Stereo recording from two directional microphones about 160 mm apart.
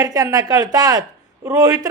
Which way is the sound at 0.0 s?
25° right (ahead or behind).